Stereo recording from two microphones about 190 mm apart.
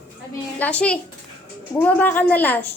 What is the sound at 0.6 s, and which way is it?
A woman's voice, 5° left (ahead or behind).